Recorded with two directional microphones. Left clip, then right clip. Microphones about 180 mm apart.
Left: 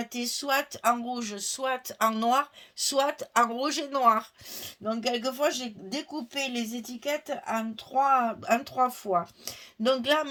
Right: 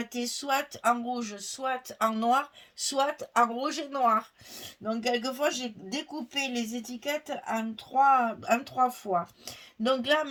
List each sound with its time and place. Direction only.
0.0 s speech: 40° left (ahead or behind)